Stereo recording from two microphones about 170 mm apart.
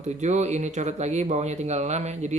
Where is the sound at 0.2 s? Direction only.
45° right (ahead or behind).